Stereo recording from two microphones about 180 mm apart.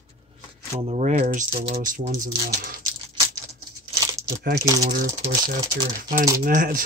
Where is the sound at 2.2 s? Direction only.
55° right (ahead or behind).